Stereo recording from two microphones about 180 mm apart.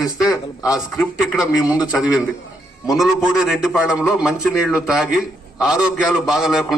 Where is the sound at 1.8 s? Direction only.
5° right (ahead or behind).